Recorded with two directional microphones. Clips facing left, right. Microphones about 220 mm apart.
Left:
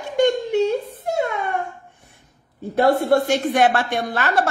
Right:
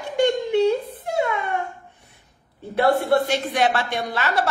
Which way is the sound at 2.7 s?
45° left (ahead or behind).